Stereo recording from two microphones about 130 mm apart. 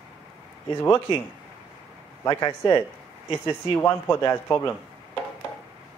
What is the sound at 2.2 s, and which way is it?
A man's voice, 25° left (ahead or behind).